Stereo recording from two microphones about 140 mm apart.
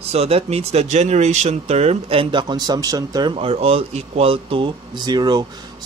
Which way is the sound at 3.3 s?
45° right (ahead or behind).